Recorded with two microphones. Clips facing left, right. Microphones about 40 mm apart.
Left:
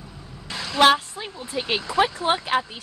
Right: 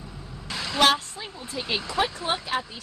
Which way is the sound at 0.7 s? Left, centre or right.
Left.